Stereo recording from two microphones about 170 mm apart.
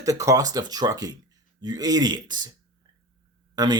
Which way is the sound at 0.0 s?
20° right (ahead or behind).